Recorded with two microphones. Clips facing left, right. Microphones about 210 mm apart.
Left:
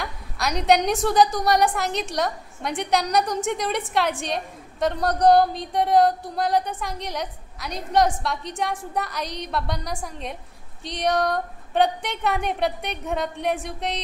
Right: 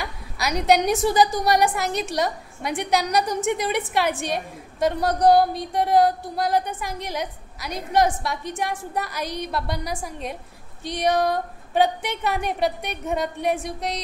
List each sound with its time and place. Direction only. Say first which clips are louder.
0.0 s a woman's voice: even; 5° right (ahead or behind)